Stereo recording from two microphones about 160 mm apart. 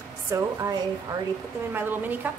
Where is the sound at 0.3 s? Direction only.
20° right (ahead or behind).